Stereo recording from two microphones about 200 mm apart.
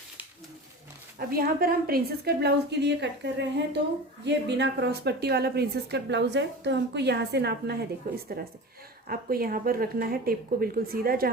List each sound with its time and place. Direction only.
1.3 s a woman's voice: 50° right (ahead or behind)